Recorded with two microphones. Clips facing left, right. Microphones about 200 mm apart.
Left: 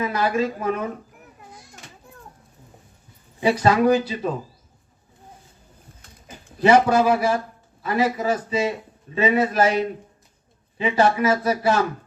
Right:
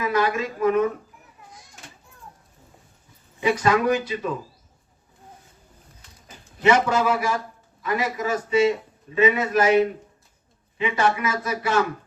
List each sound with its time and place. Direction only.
0.0 s speech: 35° left (ahead or behind)
2.0 s a sound: 55° left (ahead or behind)
3.4 s speech: 35° left (ahead or behind)
6.6 s speech: 35° left (ahead or behind)
10.8 s speech: 35° left (ahead or behind)